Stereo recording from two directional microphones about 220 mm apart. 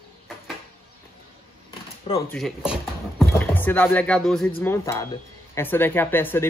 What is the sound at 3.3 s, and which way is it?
Speech, 10° left (ahead or behind).